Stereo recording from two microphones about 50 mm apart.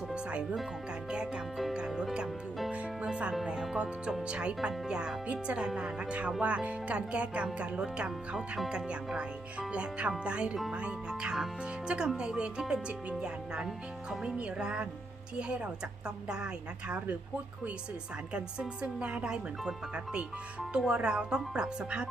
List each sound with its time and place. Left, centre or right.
0.1 s music: right
1.1 s speech: centre
2.7 s music: right
3.4 s speech: centre
18.3 s speech: right